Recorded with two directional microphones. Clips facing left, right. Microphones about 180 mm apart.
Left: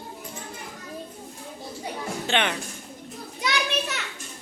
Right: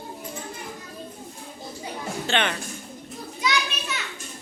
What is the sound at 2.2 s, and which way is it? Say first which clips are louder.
Speech: even; 15° left (ahead or behind).